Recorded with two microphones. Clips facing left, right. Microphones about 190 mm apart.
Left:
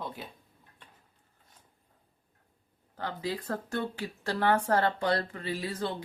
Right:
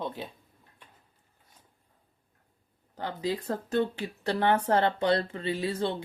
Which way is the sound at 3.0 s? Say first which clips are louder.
Right 3 dB; 15° right (ahead or behind).